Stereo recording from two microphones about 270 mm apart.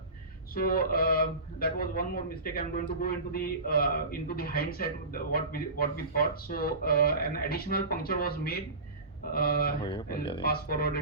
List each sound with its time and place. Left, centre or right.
0.5 s a man's voice: left
9.8 s speech: centre
10.4 s a man's voice: left